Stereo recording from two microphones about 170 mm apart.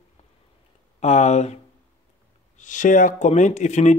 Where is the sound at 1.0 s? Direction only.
40° left (ahead or behind).